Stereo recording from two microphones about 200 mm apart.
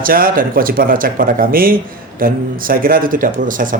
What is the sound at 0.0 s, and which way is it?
Speech, 45° right (ahead or behind).